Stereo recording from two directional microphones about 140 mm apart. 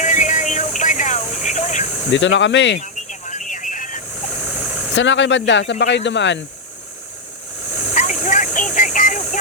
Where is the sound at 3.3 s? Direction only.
65° left (ahead or behind).